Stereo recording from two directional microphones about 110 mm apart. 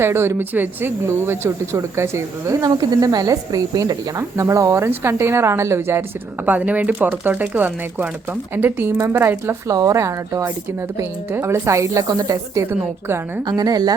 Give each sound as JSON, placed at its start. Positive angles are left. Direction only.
{"t": 0.0, "sound": "speech", "side_deg": -25}
{"t": 13.4, "sound": "a woman's voice", "side_deg": -35}